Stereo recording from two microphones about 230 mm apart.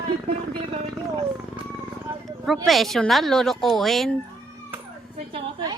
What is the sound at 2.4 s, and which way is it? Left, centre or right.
Speech, centre.